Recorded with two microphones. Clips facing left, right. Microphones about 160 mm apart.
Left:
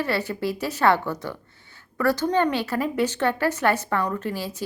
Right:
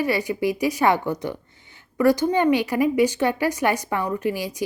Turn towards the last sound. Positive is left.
turn(degrees=-15)  # may be behind; listen again after turning